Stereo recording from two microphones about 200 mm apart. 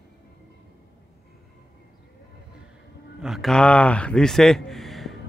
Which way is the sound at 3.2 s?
Centre (ahead or behind).